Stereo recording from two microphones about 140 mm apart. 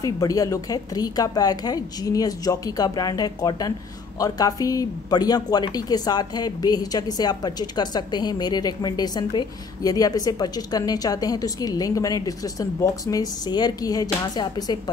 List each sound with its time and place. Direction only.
0.0 s speech: 25° left (ahead or behind)